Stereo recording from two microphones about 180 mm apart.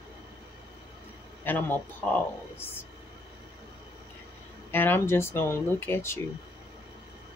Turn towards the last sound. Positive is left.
turn(degrees=15)  # may be behind; listen again after turning